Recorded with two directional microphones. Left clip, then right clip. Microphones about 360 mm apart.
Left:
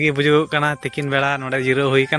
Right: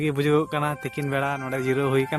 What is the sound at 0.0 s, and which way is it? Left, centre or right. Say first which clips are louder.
A man's voice: left 6 dB; right.